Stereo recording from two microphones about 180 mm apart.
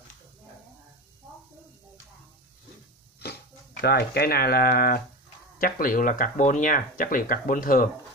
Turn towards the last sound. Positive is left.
turn(degrees=50)  # may be behind; listen again after turning